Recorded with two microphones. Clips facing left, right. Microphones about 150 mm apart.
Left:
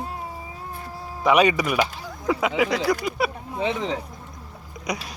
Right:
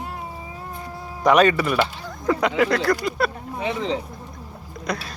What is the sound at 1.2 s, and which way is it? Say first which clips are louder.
Speech: right 2 dB; 10° left (ahead or behind).